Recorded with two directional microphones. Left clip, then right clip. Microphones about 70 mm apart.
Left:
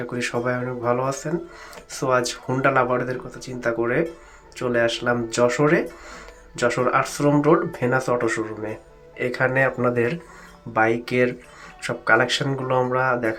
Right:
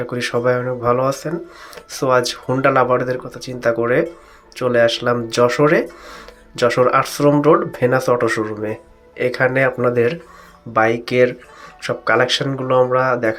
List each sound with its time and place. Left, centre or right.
0.1 s speech: right
9.1 s speech: right